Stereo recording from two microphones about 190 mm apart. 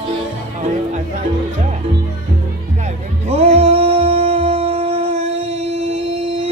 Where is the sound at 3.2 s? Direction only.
35° right (ahead or behind).